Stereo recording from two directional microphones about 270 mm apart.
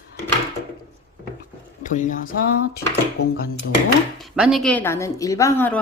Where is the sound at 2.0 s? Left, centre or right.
Left.